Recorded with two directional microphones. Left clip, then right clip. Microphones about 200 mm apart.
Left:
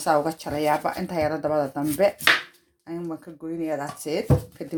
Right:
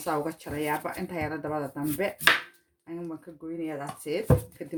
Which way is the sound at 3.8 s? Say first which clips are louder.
Left 4 dB; 30° left (ahead or behind).